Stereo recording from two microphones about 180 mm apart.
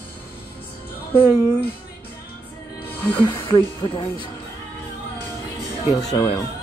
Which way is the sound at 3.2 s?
25° left (ahead or behind).